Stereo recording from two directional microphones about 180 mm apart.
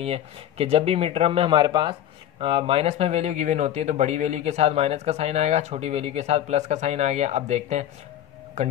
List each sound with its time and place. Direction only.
0.0 s speech: 35° right (ahead or behind)